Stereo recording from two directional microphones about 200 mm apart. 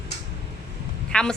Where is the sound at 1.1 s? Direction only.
5° left (ahead or behind).